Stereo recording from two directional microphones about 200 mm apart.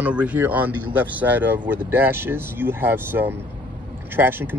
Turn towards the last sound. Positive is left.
turn(degrees=-10)  # may be behind; listen again after turning